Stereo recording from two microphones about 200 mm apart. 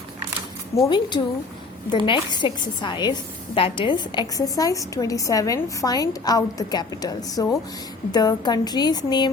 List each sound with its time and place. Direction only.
0.8 s a woman's voice: 20° left (ahead or behind)